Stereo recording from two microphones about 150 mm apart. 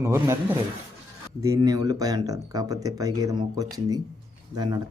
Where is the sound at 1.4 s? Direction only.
25° right (ahead or behind).